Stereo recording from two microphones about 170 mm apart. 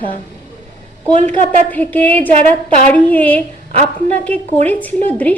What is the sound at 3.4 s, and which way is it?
Speech, 40° right (ahead or behind).